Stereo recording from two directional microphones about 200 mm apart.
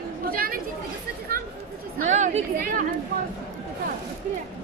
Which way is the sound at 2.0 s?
35° right (ahead or behind).